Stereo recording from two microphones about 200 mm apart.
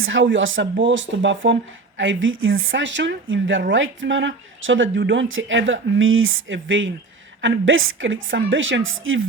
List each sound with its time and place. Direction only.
0.0 s speech: 70° right (ahead or behind)